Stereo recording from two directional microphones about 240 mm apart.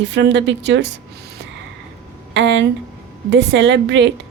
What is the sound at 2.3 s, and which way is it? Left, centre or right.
A woman's voice, right.